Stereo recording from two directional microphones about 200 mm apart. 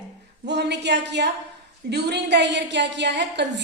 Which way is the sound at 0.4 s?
60° right (ahead or behind).